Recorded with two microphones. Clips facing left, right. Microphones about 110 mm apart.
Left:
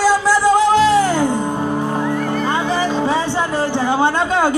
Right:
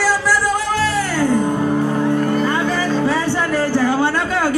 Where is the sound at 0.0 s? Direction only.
20° left (ahead or behind).